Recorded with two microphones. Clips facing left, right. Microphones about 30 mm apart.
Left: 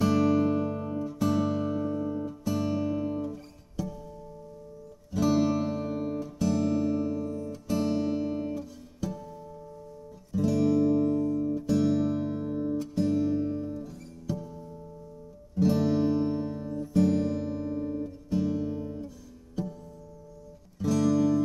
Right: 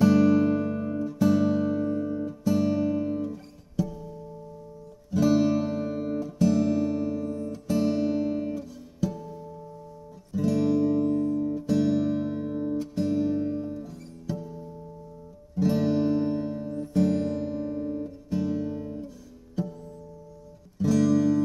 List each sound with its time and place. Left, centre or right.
0.0 s music: centre
7.2 s music: right
7.5 s music: centre